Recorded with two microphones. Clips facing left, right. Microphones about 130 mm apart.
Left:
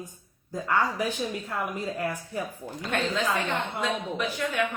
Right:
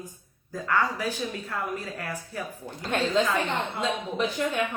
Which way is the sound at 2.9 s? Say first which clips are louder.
Right 3 dB; 30° right (ahead or behind).